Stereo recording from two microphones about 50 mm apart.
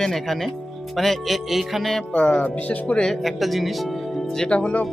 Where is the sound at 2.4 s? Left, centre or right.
Left.